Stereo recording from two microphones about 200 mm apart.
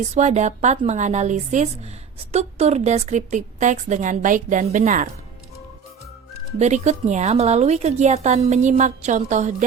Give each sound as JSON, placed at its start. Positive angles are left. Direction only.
{"t": 0.1, "sound": "a woman's voice", "side_deg": -35}
{"t": 6.6, "sound": "a woman's voice", "side_deg": -35}